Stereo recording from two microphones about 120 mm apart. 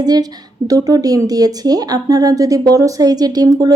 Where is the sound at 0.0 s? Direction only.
35° right (ahead or behind).